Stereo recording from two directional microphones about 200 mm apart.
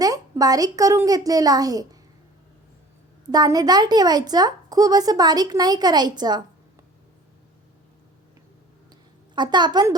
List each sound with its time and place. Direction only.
0.0 s a child's voice: 20° right (ahead or behind)
3.3 s a woman's voice: 20° right (ahead or behind)
9.3 s a woman's voice: 20° right (ahead or behind)